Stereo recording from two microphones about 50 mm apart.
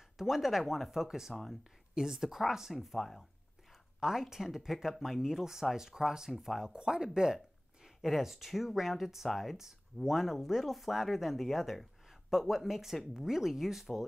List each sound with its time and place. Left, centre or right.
0.2 s speech: centre
4.0 s speech: centre